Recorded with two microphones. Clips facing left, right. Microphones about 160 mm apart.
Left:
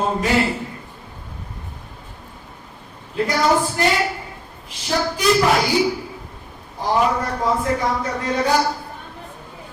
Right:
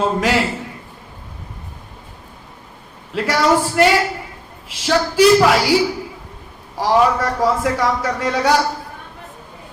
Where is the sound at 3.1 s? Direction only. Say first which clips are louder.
Right 2 dB; 80° right.